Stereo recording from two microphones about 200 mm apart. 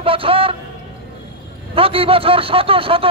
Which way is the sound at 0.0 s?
25° right (ahead or behind).